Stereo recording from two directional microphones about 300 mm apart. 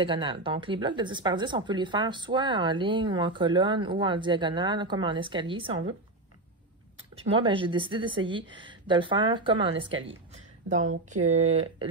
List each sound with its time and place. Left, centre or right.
0.0 s a woman's voice: centre
7.2 s a woman's voice: centre